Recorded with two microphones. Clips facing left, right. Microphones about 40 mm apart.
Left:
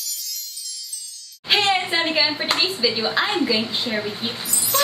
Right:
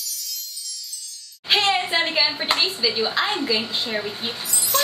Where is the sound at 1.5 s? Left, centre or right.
Centre.